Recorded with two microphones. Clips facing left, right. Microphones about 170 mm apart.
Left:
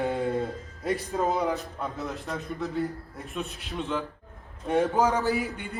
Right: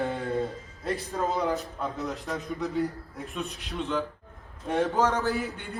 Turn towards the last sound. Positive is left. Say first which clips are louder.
# left 2 dB
turn(degrees=5)  # may be behind; listen again after turning